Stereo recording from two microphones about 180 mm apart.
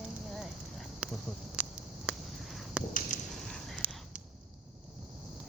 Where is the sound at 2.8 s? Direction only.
5° right (ahead or behind).